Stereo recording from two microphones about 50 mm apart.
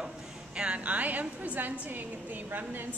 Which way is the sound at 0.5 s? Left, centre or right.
Right.